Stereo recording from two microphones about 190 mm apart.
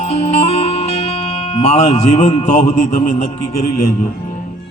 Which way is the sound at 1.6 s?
35° left (ahead or behind).